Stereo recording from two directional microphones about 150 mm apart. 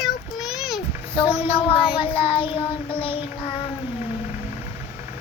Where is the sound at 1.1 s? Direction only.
35° left (ahead or behind).